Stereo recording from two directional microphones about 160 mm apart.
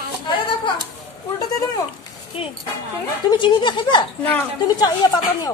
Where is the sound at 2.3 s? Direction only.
35° left (ahead or behind).